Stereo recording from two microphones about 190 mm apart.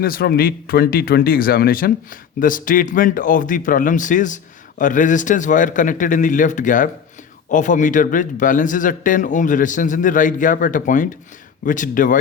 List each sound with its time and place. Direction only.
0.0 s speech: 50° left (ahead or behind)